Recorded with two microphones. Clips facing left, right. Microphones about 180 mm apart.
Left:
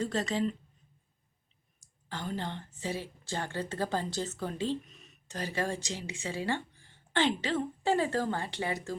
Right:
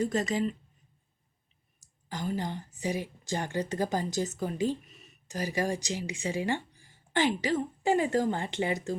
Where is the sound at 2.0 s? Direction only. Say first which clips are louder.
Right 3 dB; 10° right (ahead or behind).